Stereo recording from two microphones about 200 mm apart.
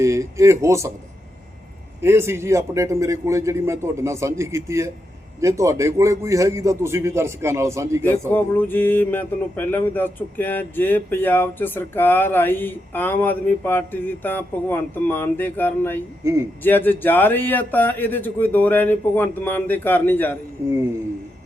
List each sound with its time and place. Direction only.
0.0 s a sound: 15° right (ahead or behind)
2.0 s a man's voice: 15° right (ahead or behind)
8.3 s speech: 10° left (ahead or behind)
16.2 s a man's voice: 15° right (ahead or behind)
16.6 s speech: 10° left (ahead or behind)